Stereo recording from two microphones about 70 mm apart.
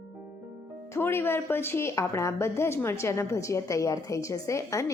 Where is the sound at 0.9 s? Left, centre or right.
Left.